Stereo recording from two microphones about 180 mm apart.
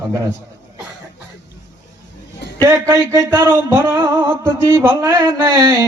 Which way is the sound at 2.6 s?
15° right (ahead or behind).